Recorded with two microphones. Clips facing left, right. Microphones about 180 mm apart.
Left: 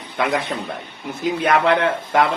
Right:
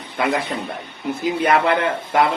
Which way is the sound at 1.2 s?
Centre (ahead or behind).